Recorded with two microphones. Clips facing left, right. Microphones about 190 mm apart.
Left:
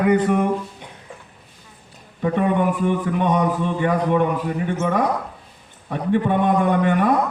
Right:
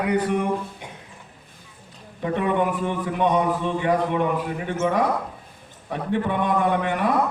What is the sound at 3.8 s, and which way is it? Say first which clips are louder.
Speech: left 3 dB; 50° left (ahead or behind).